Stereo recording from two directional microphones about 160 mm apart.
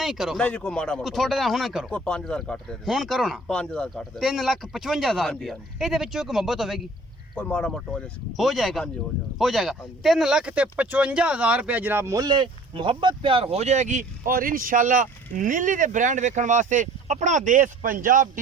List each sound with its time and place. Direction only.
0.0 s speech: centre (ahead or behind)
7.3 s speech: 10° left (ahead or behind); by 18.3 s 55° right (ahead or behind)